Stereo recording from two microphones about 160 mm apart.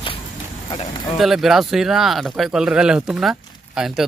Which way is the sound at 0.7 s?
30° left (ahead or behind).